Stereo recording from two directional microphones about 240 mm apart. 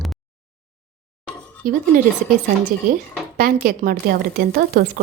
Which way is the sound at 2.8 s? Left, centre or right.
Right.